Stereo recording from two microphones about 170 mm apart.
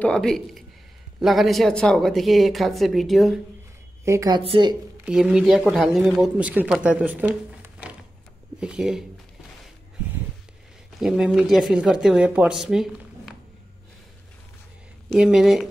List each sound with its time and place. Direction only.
0.0 s speech: 5° left (ahead or behind)
4.0 s a woman's voice: 20° right (ahead or behind)
4.4 s speech: 30° right (ahead or behind)
5.0 s speech: centre (ahead or behind)
11.0 s speech: 5° right (ahead or behind)
15.0 s speech: 5° right (ahead or behind)